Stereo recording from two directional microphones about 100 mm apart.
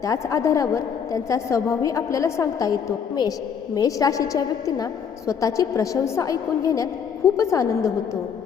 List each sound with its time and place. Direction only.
0.0 s a woman's voice: 35° left (ahead or behind)
3.8 s a woman's voice: 35° left (ahead or behind)